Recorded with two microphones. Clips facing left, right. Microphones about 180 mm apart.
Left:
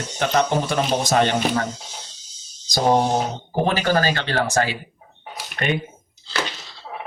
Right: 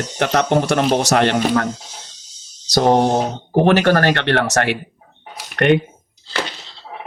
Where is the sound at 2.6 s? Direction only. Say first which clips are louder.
Right 4 dB; 70° right (ahead or behind).